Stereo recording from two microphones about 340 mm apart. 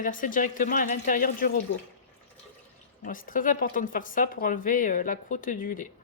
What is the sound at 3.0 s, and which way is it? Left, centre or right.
A woman's voice, left.